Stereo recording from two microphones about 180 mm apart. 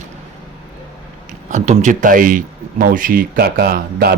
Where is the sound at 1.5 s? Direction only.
40° right (ahead or behind); by 4.1 s 60° right (ahead or behind).